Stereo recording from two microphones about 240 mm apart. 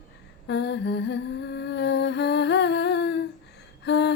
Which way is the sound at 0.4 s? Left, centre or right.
Left.